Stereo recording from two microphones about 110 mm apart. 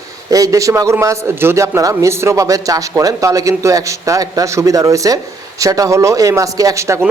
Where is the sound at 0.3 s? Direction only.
30° right (ahead or behind).